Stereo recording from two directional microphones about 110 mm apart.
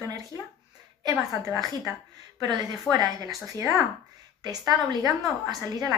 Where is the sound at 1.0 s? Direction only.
35° right (ahead or behind).